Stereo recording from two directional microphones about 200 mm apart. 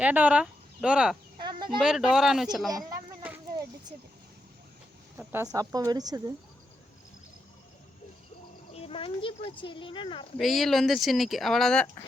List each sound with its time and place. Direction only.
0.0 s speech: 5° right (ahead or behind)
1.4 s insect: 25° right (ahead or behind)
1.8 s speech: 5° right (ahead or behind)
3.2 s a sound: 10° right (ahead or behind)
5.1 s speech: 10° right (ahead or behind)
8.7 s speech: 30° left (ahead or behind)
10.3 s speech: centre (ahead or behind)